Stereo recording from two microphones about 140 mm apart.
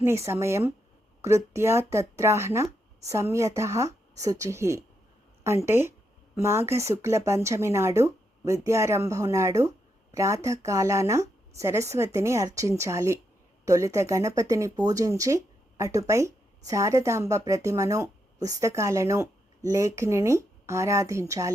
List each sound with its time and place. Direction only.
0.0 s speech: 20° right (ahead or behind)